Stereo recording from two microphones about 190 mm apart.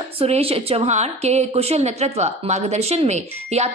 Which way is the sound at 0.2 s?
30° right (ahead or behind).